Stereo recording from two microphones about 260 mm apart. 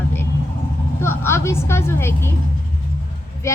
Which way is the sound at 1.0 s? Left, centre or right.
Centre.